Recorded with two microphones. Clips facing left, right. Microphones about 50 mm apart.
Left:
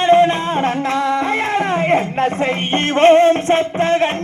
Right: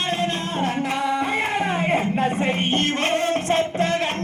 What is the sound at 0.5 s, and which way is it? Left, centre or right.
Music, left.